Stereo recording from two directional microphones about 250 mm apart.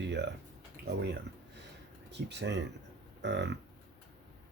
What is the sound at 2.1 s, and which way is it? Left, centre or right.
Speech, right.